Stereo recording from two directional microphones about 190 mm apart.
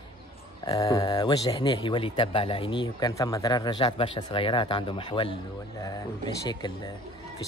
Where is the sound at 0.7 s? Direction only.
20° left (ahead or behind).